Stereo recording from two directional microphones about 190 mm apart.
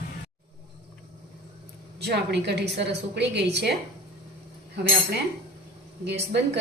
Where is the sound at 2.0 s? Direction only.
60° right (ahead or behind).